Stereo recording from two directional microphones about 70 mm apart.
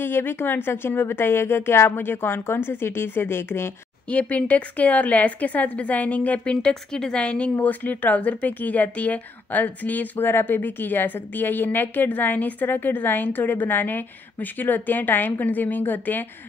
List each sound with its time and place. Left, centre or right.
0.0 s a woman's voice: left
4.1 s speech: centre